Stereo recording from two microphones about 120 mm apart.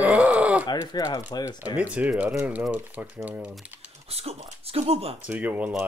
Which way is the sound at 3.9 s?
60° right (ahead or behind).